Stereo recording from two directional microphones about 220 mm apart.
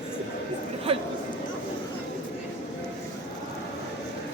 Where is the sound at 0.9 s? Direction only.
25° right (ahead or behind).